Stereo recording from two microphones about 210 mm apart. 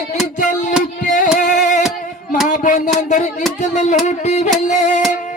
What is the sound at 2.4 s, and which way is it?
Music, 35° left (ahead or behind).